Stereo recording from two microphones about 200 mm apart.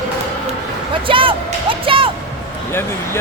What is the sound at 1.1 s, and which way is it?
Music, 25° right (ahead or behind).